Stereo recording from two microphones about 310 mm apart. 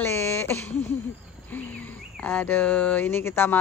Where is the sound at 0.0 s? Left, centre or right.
Centre.